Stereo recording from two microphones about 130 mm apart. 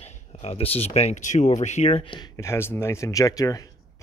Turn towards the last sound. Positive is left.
turn(degrees=25)  # may be behind; listen again after turning